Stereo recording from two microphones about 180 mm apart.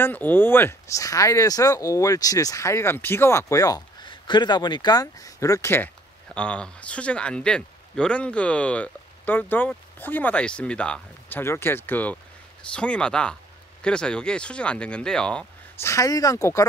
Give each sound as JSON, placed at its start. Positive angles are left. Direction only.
{"t": 0.0, "sound": "speech", "side_deg": 10}
{"t": 15.9, "sound": "speech", "side_deg": 20}